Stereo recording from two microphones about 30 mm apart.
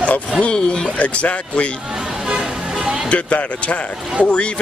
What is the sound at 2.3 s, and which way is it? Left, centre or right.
Music, right.